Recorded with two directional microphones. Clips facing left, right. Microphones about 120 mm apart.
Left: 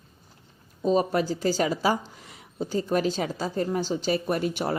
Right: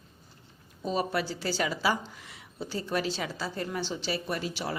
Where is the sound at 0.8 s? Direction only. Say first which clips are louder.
Left 7 dB; 40° left (ahead or behind).